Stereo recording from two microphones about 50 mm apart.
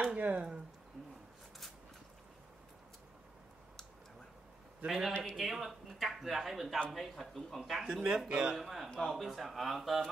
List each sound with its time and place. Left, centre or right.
0.2 s speech: right
4.8 s speech: centre
8.5 s speech: centre